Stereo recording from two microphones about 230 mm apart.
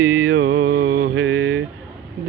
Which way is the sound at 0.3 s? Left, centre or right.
Right.